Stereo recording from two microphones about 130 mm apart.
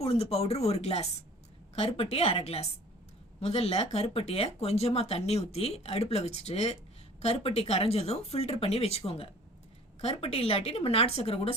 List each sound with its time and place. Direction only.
0.0 s speech: 55° left (ahead or behind)